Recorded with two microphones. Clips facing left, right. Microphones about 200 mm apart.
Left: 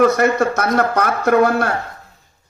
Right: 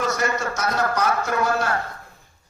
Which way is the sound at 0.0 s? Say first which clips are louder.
Left 10 dB; 60° left (ahead or behind).